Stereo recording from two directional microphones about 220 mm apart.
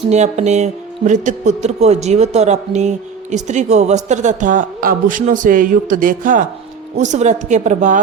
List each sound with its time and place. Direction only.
0.1 s speech: 30° right (ahead or behind)